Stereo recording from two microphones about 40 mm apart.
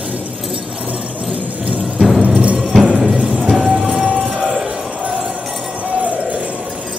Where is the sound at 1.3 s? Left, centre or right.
Right.